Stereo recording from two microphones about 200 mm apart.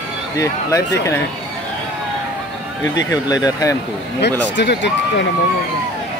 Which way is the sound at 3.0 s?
15° left (ahead or behind).